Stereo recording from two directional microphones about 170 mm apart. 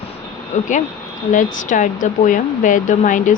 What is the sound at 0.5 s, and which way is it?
Speech, 45° left (ahead or behind).